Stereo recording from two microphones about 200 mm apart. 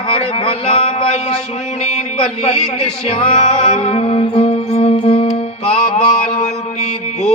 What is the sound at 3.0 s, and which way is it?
Music, 30° left (ahead or behind).